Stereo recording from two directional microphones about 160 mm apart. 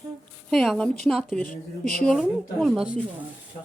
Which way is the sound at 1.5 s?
65° left (ahead or behind).